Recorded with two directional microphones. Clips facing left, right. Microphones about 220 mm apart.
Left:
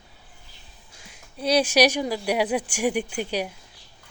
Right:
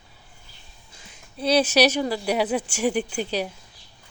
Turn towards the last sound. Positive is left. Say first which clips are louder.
# right 1 dB
turn(degrees=10)  # may be behind; listen again after turning